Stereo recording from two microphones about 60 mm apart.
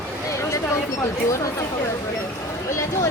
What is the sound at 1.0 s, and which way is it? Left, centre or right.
Speech, left.